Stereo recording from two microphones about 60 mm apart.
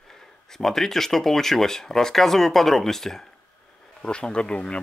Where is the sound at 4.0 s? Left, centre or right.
Centre.